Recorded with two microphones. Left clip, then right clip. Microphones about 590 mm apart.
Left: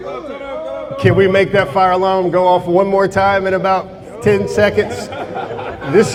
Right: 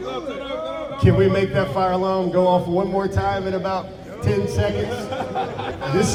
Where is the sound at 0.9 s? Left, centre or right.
Left.